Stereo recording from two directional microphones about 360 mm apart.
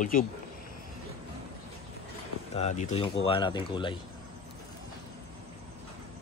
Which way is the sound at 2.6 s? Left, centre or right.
Centre.